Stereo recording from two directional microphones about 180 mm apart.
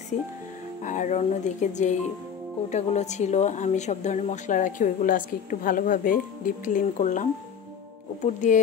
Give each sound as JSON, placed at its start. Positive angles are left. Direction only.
{"t": 0.8, "sound": "speech", "side_deg": 45}